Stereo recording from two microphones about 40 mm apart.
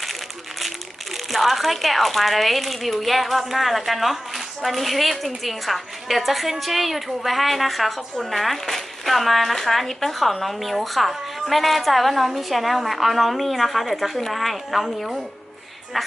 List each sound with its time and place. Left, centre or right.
1.1 s speech: centre